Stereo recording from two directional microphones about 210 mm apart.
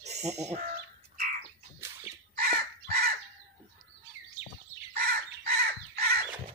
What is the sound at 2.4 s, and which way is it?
Chicken, 45° right (ahead or behind).